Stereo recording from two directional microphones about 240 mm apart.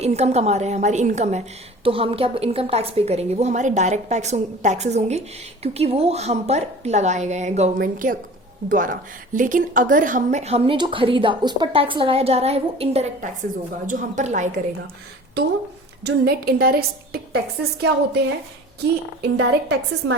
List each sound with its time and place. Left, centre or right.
0.0 s a woman's voice: right
16.0 s a woman's voice: right
19.4 s a woman's voice: right